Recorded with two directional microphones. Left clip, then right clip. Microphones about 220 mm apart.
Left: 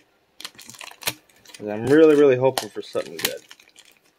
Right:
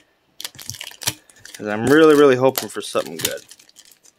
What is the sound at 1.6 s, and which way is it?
Speech, 30° right (ahead or behind).